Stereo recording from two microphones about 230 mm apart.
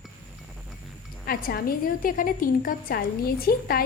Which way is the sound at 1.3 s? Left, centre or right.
Left.